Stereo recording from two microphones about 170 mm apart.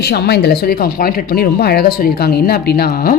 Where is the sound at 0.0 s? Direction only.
75° left (ahead or behind).